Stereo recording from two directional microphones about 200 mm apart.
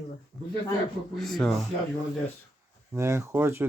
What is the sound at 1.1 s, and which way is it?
Speech, centre (ahead or behind).